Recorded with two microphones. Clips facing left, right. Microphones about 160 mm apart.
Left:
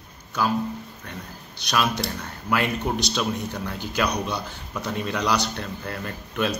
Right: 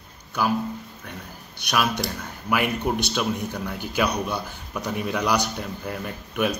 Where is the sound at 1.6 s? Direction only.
15° right (ahead or behind).